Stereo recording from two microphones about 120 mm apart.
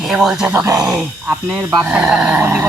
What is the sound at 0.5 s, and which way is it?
Speech, 30° right (ahead or behind).